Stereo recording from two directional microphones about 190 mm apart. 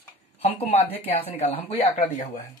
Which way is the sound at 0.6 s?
30° left (ahead or behind).